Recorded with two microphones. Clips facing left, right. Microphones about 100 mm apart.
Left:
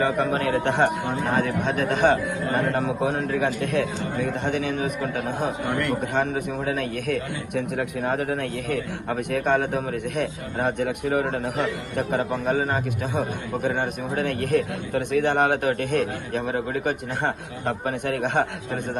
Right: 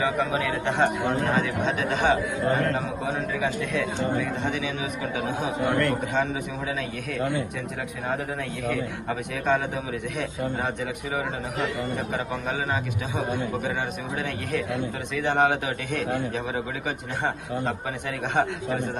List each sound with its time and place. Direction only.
0.0 s a man's voice: 55° left (ahead or behind)